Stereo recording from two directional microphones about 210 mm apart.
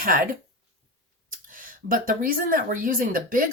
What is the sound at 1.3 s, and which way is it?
Speech, 40° right (ahead or behind).